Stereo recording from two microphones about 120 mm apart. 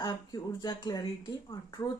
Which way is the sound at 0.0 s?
35° left (ahead or behind).